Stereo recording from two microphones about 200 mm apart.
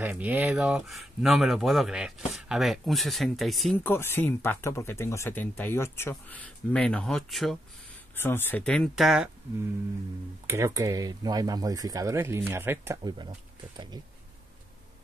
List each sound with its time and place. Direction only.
0.0 s speech: 10° right (ahead or behind)
3.8 s speech: 10° left (ahead or behind)
10.4 s speech: 15° right (ahead or behind)